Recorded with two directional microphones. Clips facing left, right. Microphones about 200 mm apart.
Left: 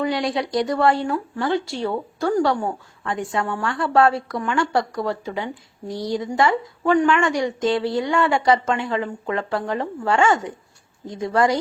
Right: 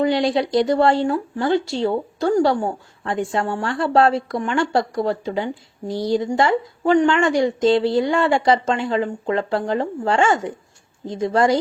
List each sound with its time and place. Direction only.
0.0 s speech: 25° right (ahead or behind)